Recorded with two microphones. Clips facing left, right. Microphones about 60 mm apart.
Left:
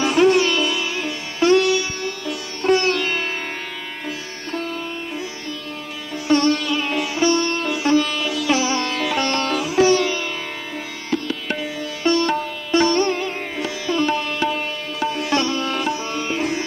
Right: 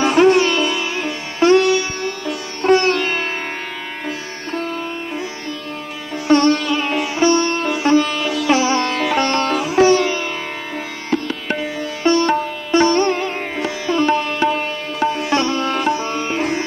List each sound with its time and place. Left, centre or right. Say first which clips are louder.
0.0 s music: right 3 dB; right
6.2 s sitar: right 4 dB; right